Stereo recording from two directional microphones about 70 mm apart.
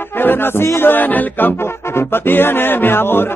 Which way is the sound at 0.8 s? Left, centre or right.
Left.